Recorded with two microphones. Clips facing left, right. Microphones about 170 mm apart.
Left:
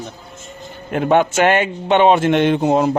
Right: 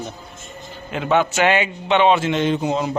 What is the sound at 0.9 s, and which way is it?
A man's voice, 50° left (ahead or behind).